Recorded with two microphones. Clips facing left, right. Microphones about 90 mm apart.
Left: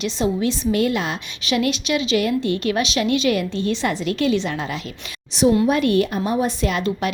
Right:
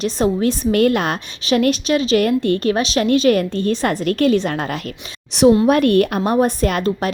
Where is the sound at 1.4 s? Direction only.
40° right (ahead or behind).